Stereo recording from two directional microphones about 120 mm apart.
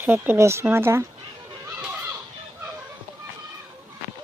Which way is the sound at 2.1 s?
30° right (ahead or behind).